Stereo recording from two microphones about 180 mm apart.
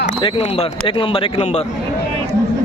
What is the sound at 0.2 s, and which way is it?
Speech, 30° left (ahead or behind).